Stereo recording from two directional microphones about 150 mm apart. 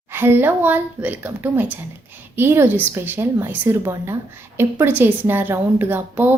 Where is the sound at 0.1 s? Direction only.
15° right (ahead or behind).